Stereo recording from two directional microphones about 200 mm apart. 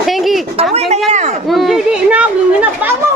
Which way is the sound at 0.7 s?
30° right (ahead or behind).